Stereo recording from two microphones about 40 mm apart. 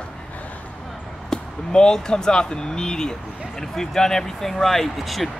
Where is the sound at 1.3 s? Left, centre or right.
Centre.